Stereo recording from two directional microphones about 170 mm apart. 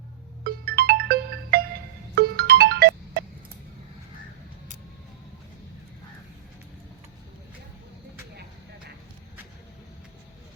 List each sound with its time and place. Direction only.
0.4 s music: 65° right (ahead or behind)